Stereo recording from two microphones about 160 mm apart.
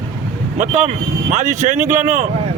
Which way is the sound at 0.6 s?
45° right (ahead or behind).